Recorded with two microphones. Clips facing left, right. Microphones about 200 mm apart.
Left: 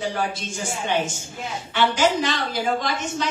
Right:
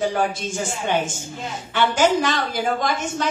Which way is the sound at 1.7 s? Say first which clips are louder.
Right 2 dB; 50° right (ahead or behind).